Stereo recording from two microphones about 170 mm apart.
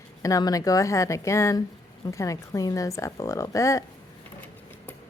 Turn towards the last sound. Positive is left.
turn(degrees=20)  # may be behind; listen again after turning